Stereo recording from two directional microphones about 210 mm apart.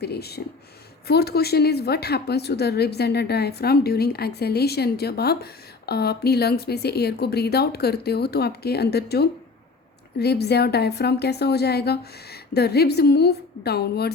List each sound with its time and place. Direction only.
0.0 s a woman's voice: 50° left (ahead or behind)